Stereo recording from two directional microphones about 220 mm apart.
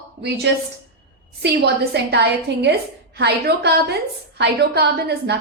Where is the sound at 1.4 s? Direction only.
50° right (ahead or behind).